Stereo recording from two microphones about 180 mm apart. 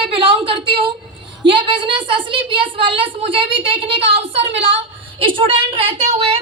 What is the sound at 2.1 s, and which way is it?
A woman's voice, 30° right (ahead or behind).